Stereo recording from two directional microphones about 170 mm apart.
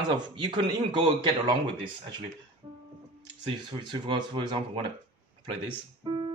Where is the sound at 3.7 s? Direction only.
25° right (ahead or behind).